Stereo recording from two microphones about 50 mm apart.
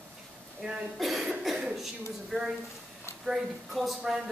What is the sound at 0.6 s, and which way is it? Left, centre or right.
Speech, centre.